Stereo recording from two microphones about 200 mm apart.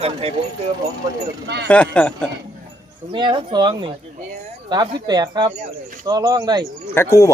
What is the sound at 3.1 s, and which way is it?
Speech, 25° right (ahead or behind).